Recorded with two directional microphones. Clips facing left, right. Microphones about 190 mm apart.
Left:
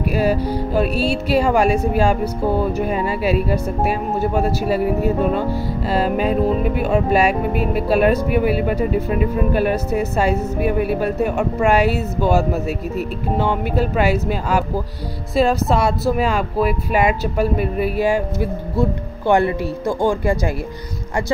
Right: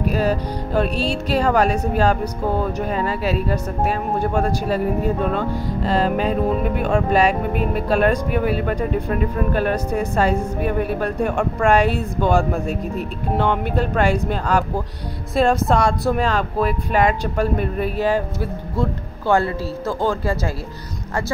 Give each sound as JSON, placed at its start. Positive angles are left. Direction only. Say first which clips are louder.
{"t": 0.0, "sound": "speech", "louder": "left 2 dB", "side_deg": 10}